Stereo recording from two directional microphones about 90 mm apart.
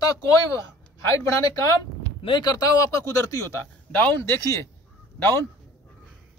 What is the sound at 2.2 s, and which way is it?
Speech, 55° left (ahead or behind).